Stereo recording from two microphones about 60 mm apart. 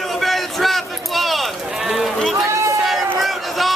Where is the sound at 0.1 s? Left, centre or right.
Centre.